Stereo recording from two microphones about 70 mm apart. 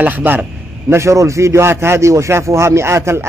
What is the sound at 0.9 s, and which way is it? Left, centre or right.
Speech, right.